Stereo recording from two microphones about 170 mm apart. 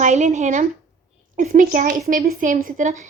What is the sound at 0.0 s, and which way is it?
A woman's voice, 45° right (ahead or behind).